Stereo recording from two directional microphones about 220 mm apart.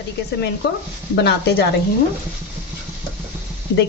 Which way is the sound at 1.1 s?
50° left (ahead or behind).